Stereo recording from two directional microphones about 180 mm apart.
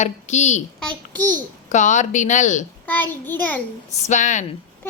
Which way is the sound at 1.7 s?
40° left (ahead or behind).